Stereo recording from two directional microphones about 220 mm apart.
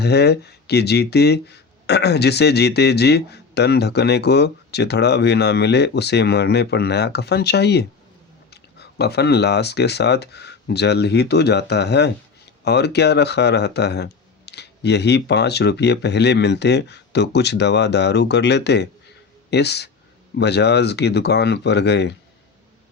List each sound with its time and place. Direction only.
0.0 s speech: 50° left (ahead or behind)